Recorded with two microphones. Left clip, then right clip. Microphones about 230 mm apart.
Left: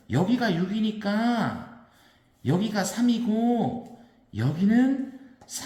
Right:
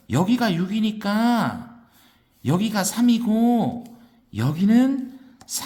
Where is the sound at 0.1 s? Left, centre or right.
Right.